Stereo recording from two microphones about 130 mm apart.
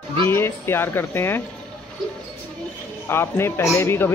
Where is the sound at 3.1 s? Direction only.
20° left (ahead or behind).